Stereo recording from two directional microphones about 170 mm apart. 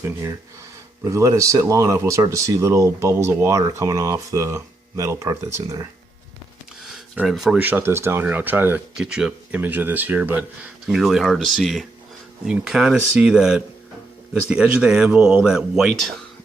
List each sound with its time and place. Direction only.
0.0 s speech: 20° right (ahead or behind)
6.8 s speech: centre (ahead or behind)